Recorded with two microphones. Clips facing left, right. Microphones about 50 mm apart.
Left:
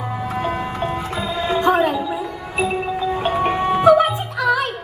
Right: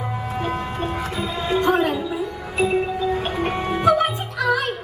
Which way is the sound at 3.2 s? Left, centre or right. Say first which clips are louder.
Left 5 dB; left.